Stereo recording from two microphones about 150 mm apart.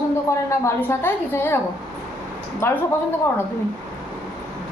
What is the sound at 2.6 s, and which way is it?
Speech, 15° left (ahead or behind).